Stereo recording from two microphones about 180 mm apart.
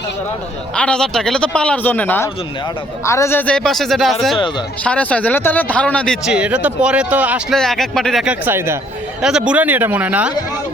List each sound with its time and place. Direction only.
0.8 s a man's voice: 5° left (ahead or behind)
4.4 s speech: 25° left (ahead or behind)
4.8 s a man's voice: 5° left (ahead or behind); by 7.4 s 10° right (ahead or behind)
7.5 s a man's voice: centre (ahead or behind)